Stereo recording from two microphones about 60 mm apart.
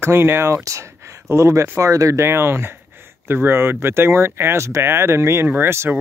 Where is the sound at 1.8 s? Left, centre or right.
Right.